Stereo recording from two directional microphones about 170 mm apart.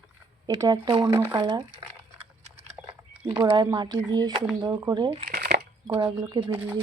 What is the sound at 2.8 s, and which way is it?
Speech, 25° right (ahead or behind).